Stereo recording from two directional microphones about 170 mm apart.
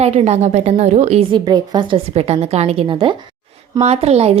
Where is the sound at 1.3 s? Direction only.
25° right (ahead or behind).